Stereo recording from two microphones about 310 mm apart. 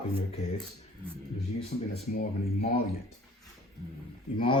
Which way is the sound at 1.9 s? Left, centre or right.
Centre.